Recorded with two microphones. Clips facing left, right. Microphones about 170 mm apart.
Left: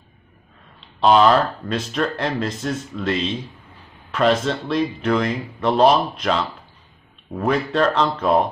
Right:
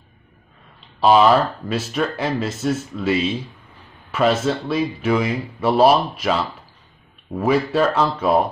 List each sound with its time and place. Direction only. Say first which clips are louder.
1.0 s speech: right 1 dB; 5° right (ahead or behind)